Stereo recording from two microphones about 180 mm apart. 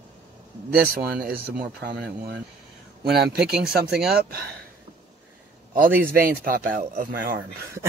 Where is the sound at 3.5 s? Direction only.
60° right (ahead or behind).